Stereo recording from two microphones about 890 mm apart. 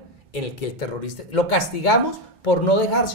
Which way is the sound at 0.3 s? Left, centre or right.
Left.